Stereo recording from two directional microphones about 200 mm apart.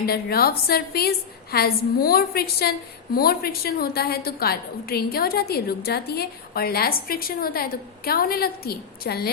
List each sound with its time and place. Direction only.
0.0 s a woman's voice: 50° left (ahead or behind)